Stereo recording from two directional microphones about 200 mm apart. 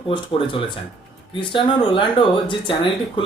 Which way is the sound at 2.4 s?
25° left (ahead or behind).